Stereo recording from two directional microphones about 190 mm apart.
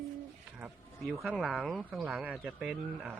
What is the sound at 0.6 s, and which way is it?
Speech, 5° right (ahead or behind).